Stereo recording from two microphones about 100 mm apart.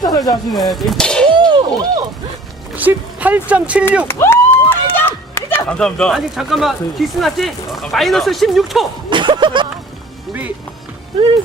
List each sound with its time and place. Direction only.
0.0 s speech: 40° left (ahead or behind)
0.5 s speech: centre (ahead or behind)
1.3 s a sound: 55° right (ahead or behind)
2.7 s speech: 15° right (ahead or behind)
4.1 s run: 25° left (ahead or behind)
5.6 s speech: 10° left (ahead or behind)
9.0 s speech: 55° right (ahead or behind)